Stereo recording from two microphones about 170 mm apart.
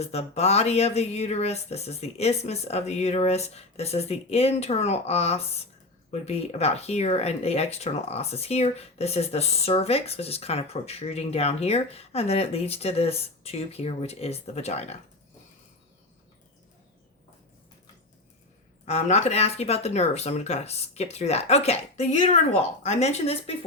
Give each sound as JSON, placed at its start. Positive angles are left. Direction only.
{"t": 0.0, "sound": "speech", "side_deg": 40}
{"t": 18.9, "sound": "speech", "side_deg": 40}